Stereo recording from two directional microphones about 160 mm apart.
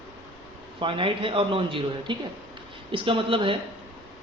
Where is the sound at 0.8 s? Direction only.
30° right (ahead or behind).